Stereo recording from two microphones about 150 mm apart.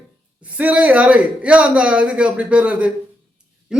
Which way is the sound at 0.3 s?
10° right (ahead or behind).